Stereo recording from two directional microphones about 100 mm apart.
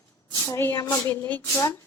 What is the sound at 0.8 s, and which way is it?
Speech, 20° left (ahead or behind).